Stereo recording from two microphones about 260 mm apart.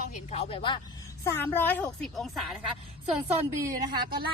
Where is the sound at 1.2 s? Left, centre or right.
Centre.